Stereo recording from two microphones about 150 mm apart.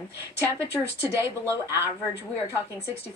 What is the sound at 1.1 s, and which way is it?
Speech, 20° right (ahead or behind).